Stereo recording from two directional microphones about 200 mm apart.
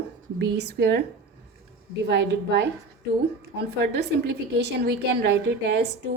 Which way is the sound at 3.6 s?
55° right (ahead or behind).